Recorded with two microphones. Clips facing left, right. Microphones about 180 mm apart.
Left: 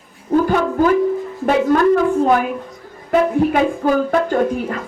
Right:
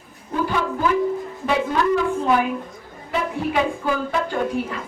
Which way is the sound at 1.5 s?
50° left (ahead or behind).